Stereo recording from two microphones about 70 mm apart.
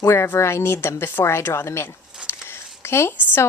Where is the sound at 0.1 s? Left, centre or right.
Left.